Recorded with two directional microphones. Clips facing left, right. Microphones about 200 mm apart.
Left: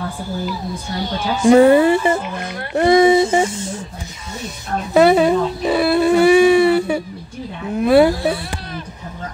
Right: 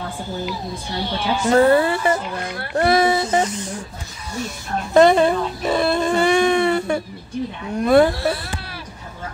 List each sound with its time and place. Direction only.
1.4 s a woman's voice: 15° left (ahead or behind)
4.9 s a sound: 5° left (ahead or behind)
7.7 s speech: 5° left (ahead or behind)